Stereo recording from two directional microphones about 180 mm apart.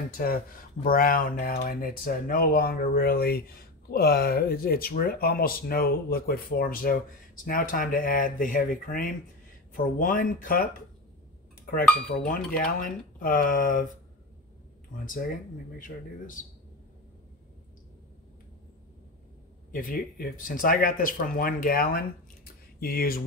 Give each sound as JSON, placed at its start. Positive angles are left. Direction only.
{"t": 0.2, "sound": "speech", "side_deg": 55}
{"t": 12.5, "sound": "speech", "side_deg": 50}
{"t": 15.0, "sound": "speech", "side_deg": 50}
{"t": 19.7, "sound": "speech", "side_deg": 50}